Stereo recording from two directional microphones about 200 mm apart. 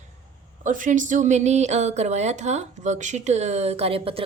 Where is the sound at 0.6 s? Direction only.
40° right (ahead or behind).